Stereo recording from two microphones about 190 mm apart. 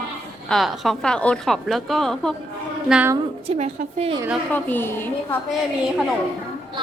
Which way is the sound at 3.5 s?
35° right (ahead or behind).